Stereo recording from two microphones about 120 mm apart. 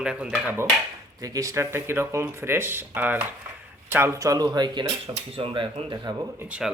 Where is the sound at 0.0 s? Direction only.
10° right (ahead or behind).